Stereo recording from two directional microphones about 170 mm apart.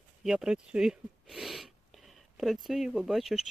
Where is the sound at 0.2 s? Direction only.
5° right (ahead or behind).